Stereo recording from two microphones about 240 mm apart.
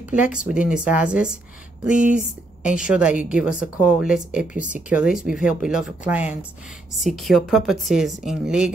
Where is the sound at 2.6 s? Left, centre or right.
Centre.